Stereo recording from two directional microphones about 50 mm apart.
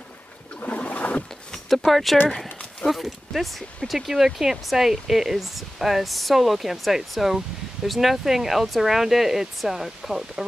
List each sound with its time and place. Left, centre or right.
0.6 s boat: left
1.7 s speech: centre